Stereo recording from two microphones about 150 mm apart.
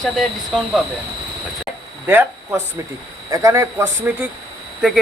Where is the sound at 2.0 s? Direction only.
15° right (ahead or behind).